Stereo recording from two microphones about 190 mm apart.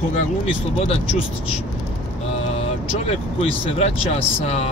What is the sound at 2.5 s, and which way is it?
Speech, 35° left (ahead or behind).